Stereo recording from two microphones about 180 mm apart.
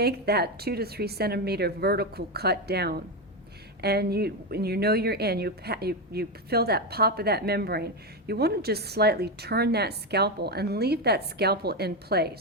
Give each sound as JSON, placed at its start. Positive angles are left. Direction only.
{"t": 0.0, "sound": "a woman's voice", "side_deg": -60}